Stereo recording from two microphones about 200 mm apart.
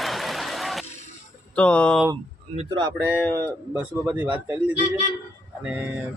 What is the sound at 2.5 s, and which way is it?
Speech, 25° right (ahead or behind).